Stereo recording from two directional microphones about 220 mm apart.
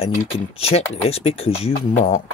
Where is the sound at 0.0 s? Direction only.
25° left (ahead or behind).